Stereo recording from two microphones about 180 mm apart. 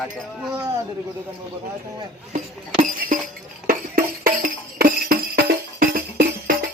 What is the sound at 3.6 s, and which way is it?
Music, 55° right (ahead or behind).